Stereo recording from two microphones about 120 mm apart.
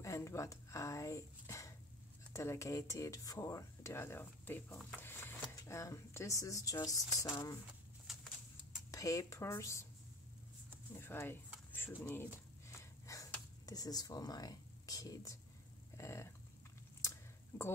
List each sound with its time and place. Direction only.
0.0 s speech: 25° left (ahead or behind)
4.9 s printer: 20° left (ahead or behind)
5.6 s speech: 25° left (ahead or behind)
8.9 s speech: 30° left (ahead or behind)
11.0 s speech: 20° left (ahead or behind)
12.6 s snort: 25° left (ahead or behind)
13.7 s speech: 30° left (ahead or behind)
16.0 s dog: 25° left (ahead or behind)
17.0 s a sound: 20° left (ahead or behind)